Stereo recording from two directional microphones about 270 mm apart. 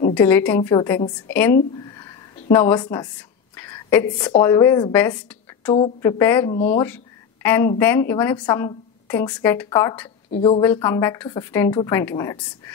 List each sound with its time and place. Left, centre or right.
0.1 s a woman's voice: centre
1.9 s a sound: centre
2.5 s a woman's voice: centre
10.3 s a woman's voice: left
10.6 s a woman's voice: centre